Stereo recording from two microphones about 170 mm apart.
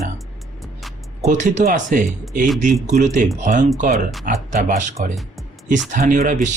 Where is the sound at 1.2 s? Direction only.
50° right (ahead or behind).